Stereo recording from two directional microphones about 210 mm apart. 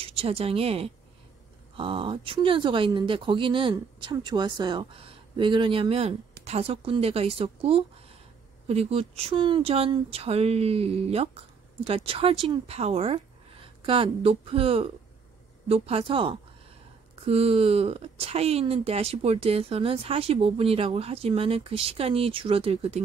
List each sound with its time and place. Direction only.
0.0 s speech: 25° right (ahead or behind)